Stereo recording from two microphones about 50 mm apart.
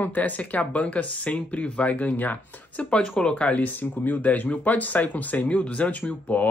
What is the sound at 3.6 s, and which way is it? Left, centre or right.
Speech, left.